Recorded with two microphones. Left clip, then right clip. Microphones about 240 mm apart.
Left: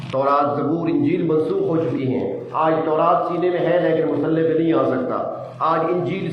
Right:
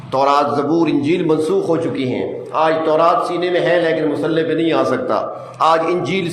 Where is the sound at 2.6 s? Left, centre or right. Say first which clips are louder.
Right 4 dB; right.